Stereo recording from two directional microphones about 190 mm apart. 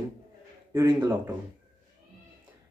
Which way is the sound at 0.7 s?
15° right (ahead or behind).